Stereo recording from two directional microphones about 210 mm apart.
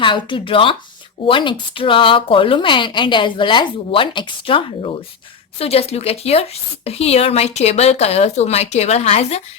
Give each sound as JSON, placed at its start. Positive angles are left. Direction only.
{"t": 0.0, "sound": "speech", "side_deg": 25}